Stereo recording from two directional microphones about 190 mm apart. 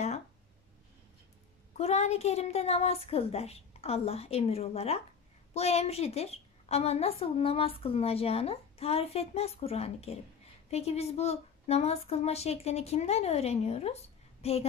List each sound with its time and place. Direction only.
1.8 s a woman's voice: 35° left (ahead or behind)